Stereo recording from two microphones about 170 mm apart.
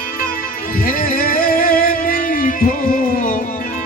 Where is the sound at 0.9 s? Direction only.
55° left (ahead or behind).